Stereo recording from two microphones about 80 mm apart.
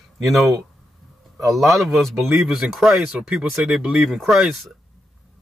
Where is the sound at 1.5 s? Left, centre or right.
Centre.